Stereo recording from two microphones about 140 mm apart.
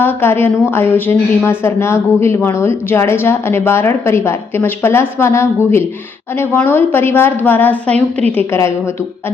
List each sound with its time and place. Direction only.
0.0 s a woman's voice: 15° left (ahead or behind)
7.9 s a woman's voice: 50° right (ahead or behind)